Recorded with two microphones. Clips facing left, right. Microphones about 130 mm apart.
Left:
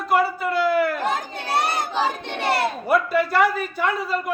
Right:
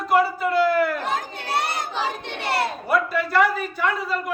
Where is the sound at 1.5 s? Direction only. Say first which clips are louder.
Left 3 dB; 40° left (ahead or behind).